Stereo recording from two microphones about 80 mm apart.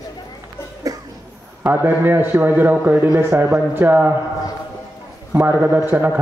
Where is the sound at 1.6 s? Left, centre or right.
Right.